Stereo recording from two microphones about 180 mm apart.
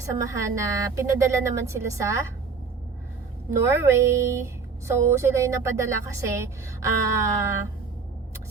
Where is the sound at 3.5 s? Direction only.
15° right (ahead or behind).